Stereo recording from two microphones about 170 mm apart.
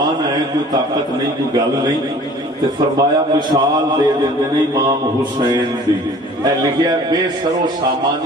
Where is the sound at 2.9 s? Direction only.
25° right (ahead or behind).